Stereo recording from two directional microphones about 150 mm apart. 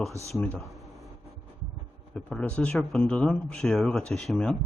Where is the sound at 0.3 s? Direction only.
5° left (ahead or behind).